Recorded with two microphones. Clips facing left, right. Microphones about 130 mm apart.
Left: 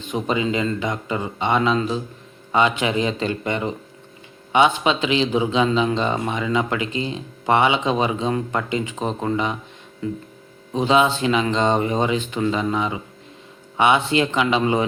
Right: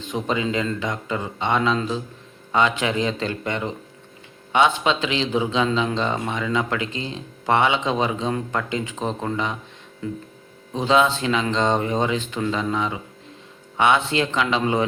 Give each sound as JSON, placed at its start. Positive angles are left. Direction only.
{"t": 0.1, "sound": "a man's voice", "side_deg": 5}
{"t": 10.8, "sound": "a man's voice", "side_deg": 5}